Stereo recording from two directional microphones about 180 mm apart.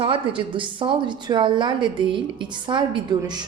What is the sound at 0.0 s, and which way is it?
A woman's voice, 30° right (ahead or behind).